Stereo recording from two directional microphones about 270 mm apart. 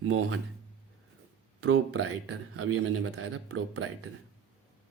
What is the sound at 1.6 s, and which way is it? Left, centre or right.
Speech, right.